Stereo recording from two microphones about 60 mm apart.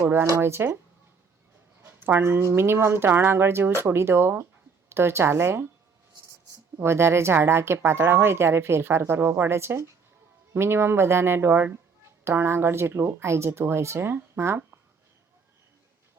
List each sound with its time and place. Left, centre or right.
0.0 s speech: right
0.3 s speech: right
1.8 s speech: right
6.7 s speech: right